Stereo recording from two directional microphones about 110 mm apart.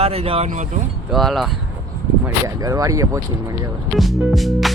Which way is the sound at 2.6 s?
30° right (ahead or behind).